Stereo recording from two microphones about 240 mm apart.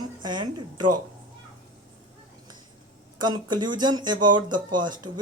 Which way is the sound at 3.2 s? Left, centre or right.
Centre.